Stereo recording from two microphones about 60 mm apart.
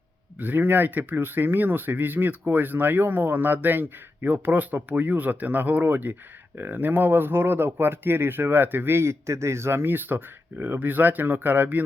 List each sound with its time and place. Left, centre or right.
0.3 s speech: right